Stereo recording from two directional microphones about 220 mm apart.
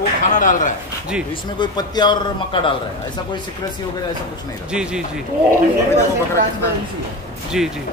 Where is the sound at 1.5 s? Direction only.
20° left (ahead or behind).